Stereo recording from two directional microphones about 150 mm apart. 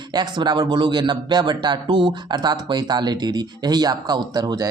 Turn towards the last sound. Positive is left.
turn(degrees=-25)  # may be behind; listen again after turning